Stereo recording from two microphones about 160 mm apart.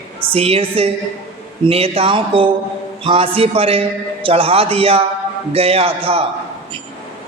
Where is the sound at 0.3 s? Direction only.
40° right (ahead or behind).